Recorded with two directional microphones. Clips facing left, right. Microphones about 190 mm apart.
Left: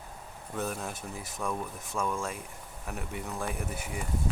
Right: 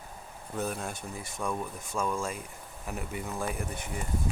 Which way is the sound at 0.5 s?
Centre (ahead or behind).